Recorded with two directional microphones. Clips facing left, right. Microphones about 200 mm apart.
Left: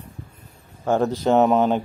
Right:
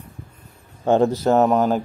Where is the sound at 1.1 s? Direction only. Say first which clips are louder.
Even; 5° right (ahead or behind).